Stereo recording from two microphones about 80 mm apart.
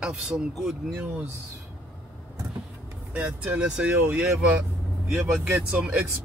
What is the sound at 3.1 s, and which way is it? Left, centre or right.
Speech, right.